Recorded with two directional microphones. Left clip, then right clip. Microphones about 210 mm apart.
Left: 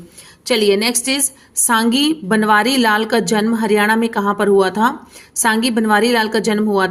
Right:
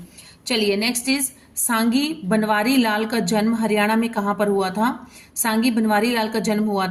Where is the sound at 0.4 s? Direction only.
45° left (ahead or behind).